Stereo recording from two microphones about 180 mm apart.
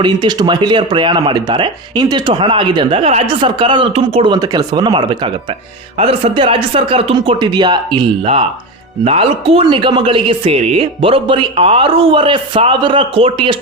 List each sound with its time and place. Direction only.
0.0 s speech: 25° right (ahead or behind)